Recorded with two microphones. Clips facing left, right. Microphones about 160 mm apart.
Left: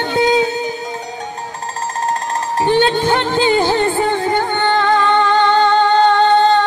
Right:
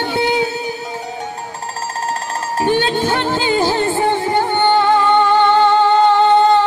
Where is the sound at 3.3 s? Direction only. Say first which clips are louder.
Left 2 dB; 20° left (ahead or behind).